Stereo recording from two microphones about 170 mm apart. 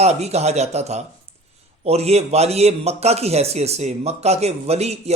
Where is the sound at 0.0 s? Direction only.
40° right (ahead or behind).